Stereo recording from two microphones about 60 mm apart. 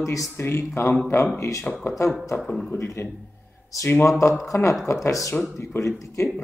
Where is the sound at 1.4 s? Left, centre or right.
Left.